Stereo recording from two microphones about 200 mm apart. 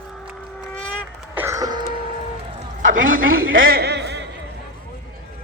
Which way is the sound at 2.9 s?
80° right.